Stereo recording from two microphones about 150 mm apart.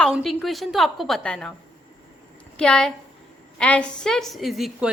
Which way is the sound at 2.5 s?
5° left (ahead or behind).